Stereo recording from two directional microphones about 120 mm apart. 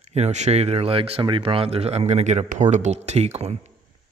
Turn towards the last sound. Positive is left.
turn(degrees=-65)  # may be behind; listen again after turning